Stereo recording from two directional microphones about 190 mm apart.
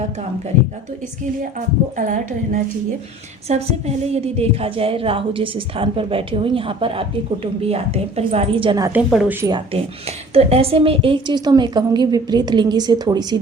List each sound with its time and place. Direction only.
1.5 s a woman's voice: 40° right (ahead or behind); by 8.9 s 25° right (ahead or behind)
9.1 s speech: 10° right (ahead or behind)
9.5 s a woman's voice: 30° right (ahead or behind)